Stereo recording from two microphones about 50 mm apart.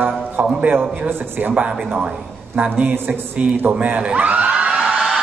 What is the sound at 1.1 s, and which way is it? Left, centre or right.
Speech, right.